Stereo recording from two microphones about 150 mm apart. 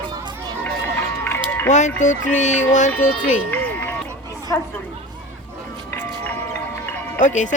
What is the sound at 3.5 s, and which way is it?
Music, 10° left (ahead or behind).